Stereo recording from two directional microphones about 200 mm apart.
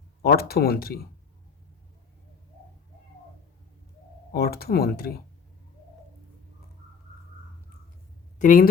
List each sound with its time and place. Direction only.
0.2 s speech: 50° left (ahead or behind)
4.3 s speech: 50° left (ahead or behind)
8.4 s speech: 45° left (ahead or behind)